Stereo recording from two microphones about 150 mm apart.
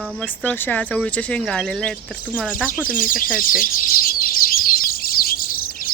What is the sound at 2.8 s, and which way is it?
Speech, 65° left (ahead or behind).